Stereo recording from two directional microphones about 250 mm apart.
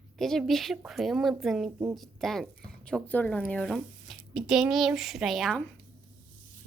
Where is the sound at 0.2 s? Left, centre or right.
Centre.